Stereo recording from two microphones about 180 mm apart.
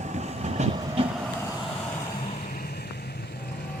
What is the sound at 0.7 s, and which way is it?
Train, 35° right (ahead or behind).